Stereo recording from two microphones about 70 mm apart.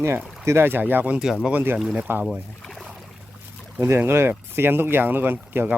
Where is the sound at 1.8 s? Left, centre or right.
Centre.